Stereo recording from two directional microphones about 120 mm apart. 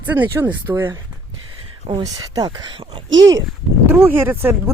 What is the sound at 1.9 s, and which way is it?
Speech, 45° right (ahead or behind).